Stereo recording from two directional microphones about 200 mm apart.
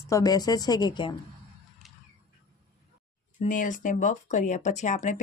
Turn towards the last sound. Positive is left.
turn(degrees=35)  # may be behind; listen again after turning